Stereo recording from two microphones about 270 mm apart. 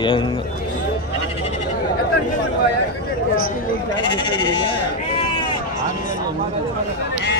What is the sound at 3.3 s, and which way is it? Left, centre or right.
Sheep, left.